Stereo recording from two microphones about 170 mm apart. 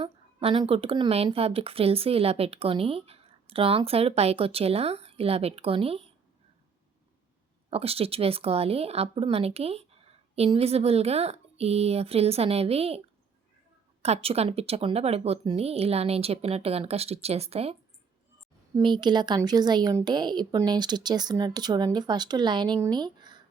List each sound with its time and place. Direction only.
0.0 s speech: 30° right (ahead or behind)
7.7 s speech: 35° right (ahead or behind)
14.0 s speech: 35° right (ahead or behind)
18.8 s a woman's voice: 25° right (ahead or behind)